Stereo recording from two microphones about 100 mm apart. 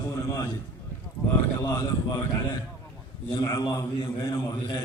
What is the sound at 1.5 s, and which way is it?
Speech, 35° left (ahead or behind).